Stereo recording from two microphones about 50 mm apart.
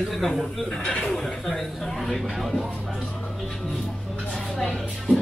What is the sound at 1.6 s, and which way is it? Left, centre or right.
Speech, centre.